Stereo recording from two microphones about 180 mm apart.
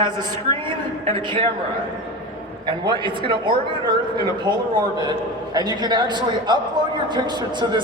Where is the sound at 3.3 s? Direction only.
25° right (ahead or behind).